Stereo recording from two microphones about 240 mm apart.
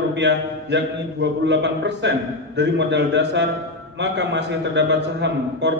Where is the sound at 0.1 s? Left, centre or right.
Right.